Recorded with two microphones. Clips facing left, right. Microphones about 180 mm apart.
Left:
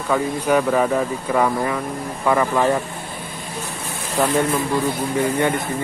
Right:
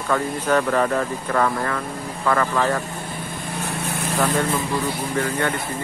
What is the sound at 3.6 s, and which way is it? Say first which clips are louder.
Vehicle: right 3 dB; 65° right (ahead or behind).